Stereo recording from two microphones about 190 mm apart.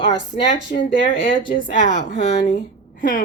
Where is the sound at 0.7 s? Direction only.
40° left (ahead or behind).